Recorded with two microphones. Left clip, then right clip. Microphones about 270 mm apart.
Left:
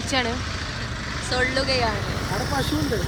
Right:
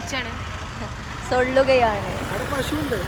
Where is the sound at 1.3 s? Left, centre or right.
Right.